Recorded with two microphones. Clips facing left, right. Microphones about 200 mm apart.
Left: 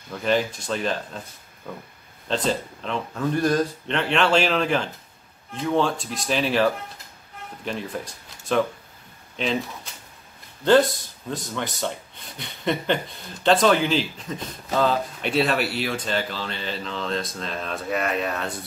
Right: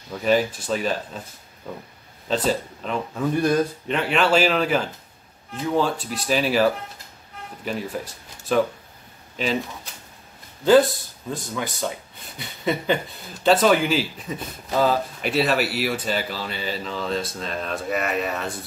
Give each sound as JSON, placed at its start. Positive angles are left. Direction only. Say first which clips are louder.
{"t": 0.1, "sound": "speech", "louder": "right 2 dB", "side_deg": -5}
{"t": 2.2, "sound": "speech", "louder": "right 2 dB", "side_deg": -5}
{"t": 11.2, "sound": "speech", "louder": "right 1 dB", "side_deg": -5}